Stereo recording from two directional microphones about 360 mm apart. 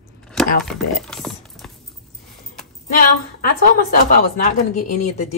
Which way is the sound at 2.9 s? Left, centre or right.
Left.